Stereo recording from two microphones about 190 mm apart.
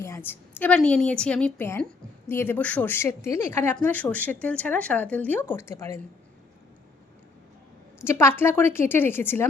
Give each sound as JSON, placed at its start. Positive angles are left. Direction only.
{"t": 0.0, "sound": "a woman's voice", "side_deg": 10}
{"t": 8.0, "sound": "speech", "side_deg": 15}